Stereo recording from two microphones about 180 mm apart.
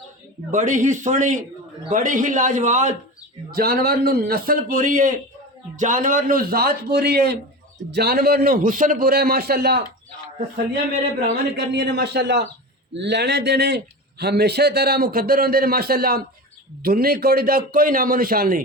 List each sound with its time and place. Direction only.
0.5 s a man's voice: 45° right (ahead or behind)
3.5 s a man's voice: 55° right (ahead or behind)
11.7 s a man's voice: 65° right (ahead or behind)